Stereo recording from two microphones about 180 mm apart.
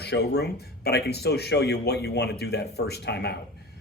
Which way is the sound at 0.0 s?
65° left (ahead or behind).